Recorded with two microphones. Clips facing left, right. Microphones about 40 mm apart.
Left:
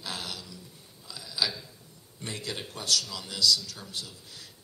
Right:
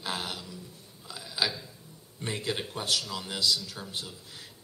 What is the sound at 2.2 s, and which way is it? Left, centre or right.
A man's voice, right.